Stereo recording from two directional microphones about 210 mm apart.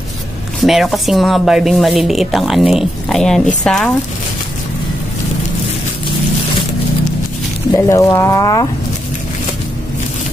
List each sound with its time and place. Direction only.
0.6 s a woman's voice: centre (ahead or behind)
7.7 s speech: 15° left (ahead or behind)